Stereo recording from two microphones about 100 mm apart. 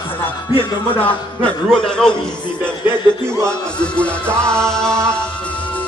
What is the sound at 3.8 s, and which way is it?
Music, 10° left (ahead or behind).